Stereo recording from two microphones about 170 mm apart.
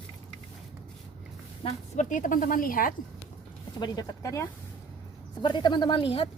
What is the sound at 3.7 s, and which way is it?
A woman's voice, 25° left (ahead or behind).